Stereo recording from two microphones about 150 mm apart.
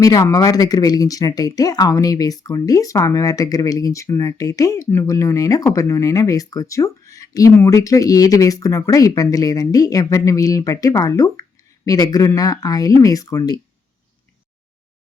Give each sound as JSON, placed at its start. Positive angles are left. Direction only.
{"t": 0.0, "sound": "speech", "side_deg": 20}